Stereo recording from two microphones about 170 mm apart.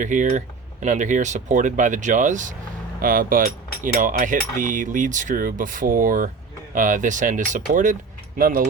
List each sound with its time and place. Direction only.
0.0 s speech: 50° right (ahead or behind)